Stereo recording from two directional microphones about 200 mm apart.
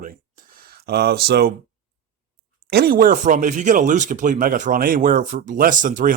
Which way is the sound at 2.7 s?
50° right (ahead or behind).